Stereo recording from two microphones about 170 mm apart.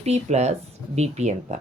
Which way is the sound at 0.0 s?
40° right (ahead or behind).